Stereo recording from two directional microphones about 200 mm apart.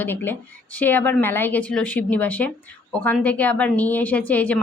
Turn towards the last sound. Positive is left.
turn(degrees=5)  # may be behind; listen again after turning